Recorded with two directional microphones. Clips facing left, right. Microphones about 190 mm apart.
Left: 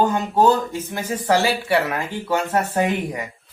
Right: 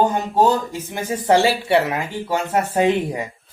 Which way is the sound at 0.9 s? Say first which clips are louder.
Right 3 dB; 20° right (ahead or behind).